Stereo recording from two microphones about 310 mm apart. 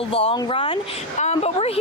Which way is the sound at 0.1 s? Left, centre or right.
Centre.